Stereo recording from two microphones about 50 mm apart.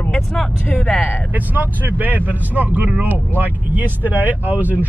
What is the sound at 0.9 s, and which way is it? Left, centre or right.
Speech, left.